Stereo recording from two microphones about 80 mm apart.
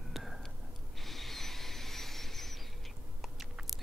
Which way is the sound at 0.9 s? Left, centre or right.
Centre.